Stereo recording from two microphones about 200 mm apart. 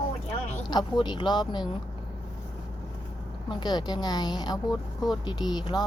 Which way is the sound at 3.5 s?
20° left (ahead or behind).